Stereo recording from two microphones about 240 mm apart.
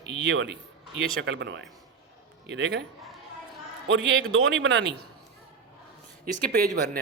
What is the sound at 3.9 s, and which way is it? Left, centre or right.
A man's voice, right.